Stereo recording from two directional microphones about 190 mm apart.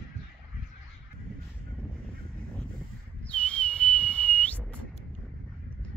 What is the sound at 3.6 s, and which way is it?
Whistle, 5° left (ahead or behind).